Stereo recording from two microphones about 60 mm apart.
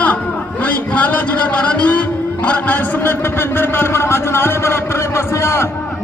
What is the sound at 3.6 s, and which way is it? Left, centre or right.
A man's voice, left.